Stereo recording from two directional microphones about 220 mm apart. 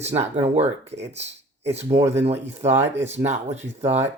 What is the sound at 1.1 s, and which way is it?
Speech, 30° right (ahead or behind).